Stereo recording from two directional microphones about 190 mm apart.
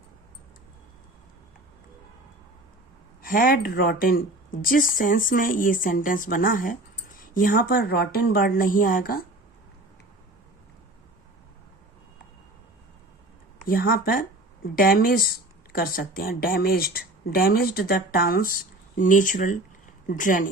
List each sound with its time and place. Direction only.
3.2 s speech: 50° left (ahead or behind)
13.6 s speech: 50° left (ahead or behind)